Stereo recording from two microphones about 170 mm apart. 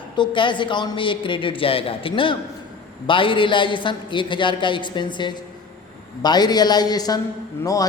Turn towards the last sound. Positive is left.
turn(degrees=20)  # may be behind; listen again after turning